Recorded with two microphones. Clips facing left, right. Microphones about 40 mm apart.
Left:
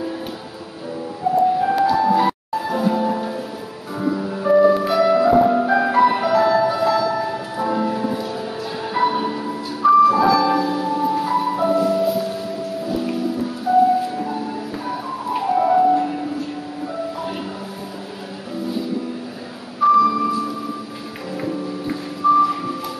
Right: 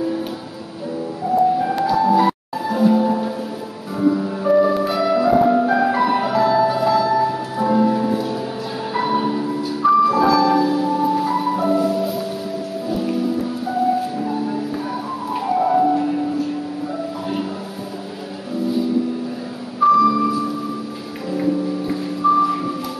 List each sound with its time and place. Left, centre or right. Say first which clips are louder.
1.3 s music: even; centre
13.7 s music: left 5 dB; centre
19.8 s vehicle: right 1 dB; centre
21.3 s music: right 6 dB; centre
22.4 s a sound: even; centre